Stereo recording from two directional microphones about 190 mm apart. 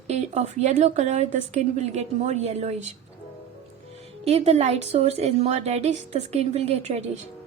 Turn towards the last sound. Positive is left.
turn(degrees=-35)  # may be behind; listen again after turning